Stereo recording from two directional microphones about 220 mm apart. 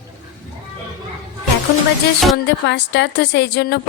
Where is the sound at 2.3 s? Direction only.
50° left (ahead or behind).